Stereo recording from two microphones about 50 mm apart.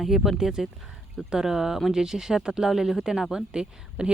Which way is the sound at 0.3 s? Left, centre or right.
Centre.